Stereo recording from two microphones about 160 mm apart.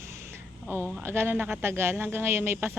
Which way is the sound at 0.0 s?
15° right (ahead or behind).